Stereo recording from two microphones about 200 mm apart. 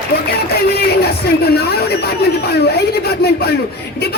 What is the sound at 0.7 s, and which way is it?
Speech, 50° left (ahead or behind).